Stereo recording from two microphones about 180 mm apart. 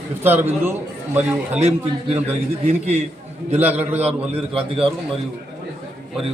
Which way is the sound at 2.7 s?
40° right (ahead or behind).